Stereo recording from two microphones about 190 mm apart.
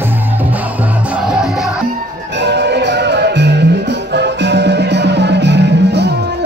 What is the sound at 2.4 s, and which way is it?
Music, 65° right (ahead or behind).